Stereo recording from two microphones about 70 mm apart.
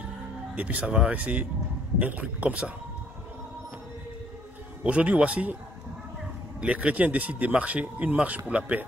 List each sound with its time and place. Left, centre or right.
0.6 s a man's voice: centre
4.8 s speech: centre
6.6 s speech: centre